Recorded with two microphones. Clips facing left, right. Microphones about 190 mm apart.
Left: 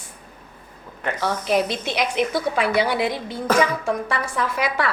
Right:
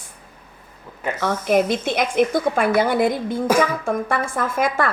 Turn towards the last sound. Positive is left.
turn(degrees=-50)  # may be behind; listen again after turning